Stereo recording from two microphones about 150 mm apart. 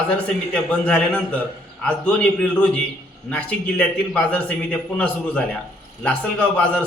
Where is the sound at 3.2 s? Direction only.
10° left (ahead or behind).